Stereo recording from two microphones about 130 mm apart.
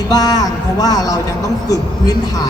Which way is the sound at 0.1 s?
30° left (ahead or behind).